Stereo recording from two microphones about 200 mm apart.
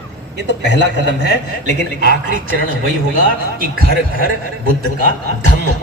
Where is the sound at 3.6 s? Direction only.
50° right (ahead or behind).